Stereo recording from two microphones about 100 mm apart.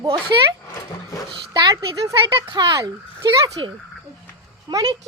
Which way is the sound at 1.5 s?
40° right (ahead or behind).